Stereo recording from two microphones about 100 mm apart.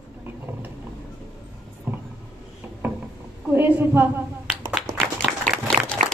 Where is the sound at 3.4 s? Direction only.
20° right (ahead or behind).